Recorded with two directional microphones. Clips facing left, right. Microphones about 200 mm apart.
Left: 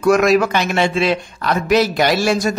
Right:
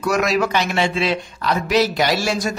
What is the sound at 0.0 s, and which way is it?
A man's voice, 50° left (ahead or behind).